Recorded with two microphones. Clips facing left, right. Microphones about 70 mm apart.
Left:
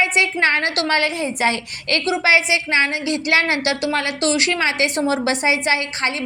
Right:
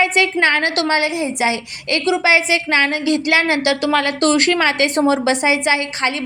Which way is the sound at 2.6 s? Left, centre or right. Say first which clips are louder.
Right 2 dB; right.